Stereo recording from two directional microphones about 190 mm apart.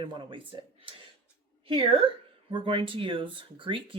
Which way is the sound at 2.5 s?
25° right (ahead or behind).